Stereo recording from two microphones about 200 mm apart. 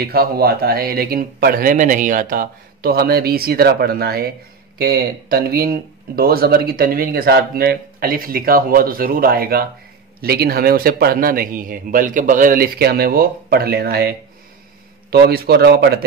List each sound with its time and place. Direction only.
0.0 s speech: 50° right (ahead or behind)